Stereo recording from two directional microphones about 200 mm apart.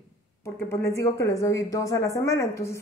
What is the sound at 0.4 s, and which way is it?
Speech, 15° left (ahead or behind).